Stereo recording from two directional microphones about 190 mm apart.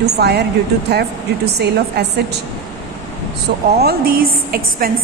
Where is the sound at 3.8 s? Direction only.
55° right (ahead or behind).